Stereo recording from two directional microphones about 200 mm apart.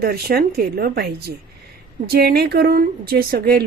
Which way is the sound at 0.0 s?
50° right (ahead or behind).